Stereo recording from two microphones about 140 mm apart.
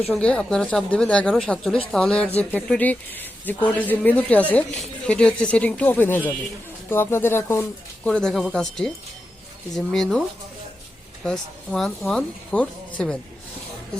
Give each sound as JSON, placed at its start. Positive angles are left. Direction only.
{"t": 0.1, "sound": "speech", "side_deg": 5}
{"t": 8.0, "sound": "speech", "side_deg": 5}